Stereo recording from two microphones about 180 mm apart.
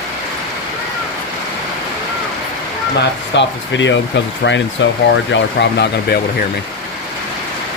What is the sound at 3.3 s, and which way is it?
Speech, 90° left.